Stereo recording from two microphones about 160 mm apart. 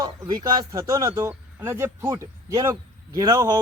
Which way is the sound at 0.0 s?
25° right (ahead or behind).